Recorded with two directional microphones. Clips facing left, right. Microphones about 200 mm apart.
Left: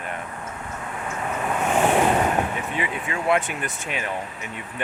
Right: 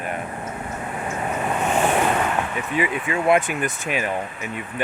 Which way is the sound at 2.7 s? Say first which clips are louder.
Right 5 dB; 10° right (ahead or behind).